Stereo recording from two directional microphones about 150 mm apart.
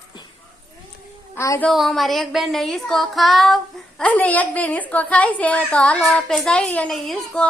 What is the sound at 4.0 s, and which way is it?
A woman's voice, 10° left (ahead or behind).